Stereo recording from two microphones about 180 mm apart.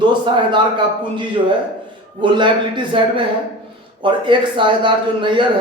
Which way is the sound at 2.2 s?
25° right (ahead or behind).